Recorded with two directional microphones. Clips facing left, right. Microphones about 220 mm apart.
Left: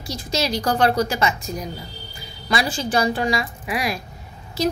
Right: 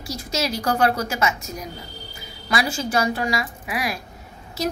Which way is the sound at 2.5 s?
5° right (ahead or behind).